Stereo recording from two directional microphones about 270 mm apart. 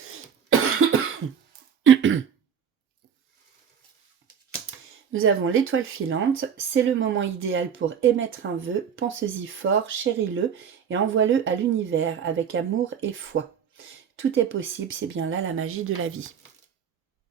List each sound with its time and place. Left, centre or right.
1.8 s throat clearing: right
5.1 s speech: right